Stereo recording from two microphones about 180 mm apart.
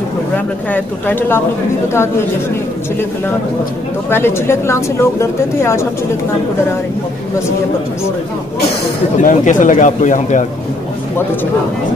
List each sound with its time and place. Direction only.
0.7 s a woman's voice: 10° left (ahead or behind)
4.1 s a woman's voice: 15° left (ahead or behind)
9.2 s speech: 45° left (ahead or behind)